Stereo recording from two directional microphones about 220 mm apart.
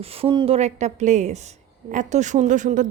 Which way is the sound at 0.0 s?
25° right (ahead or behind).